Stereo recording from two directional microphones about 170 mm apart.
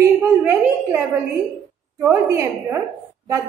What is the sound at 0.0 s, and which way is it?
Speech, 15° right (ahead or behind).